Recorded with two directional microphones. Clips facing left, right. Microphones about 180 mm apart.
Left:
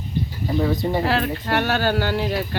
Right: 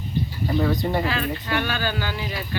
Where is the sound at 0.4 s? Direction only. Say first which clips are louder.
Left 1 dB; centre (ahead or behind).